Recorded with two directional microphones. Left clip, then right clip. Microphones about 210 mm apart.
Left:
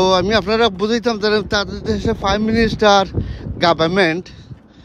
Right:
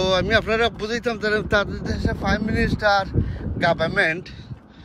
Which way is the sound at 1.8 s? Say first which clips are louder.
Left 7 dB; 25° left (ahead or behind).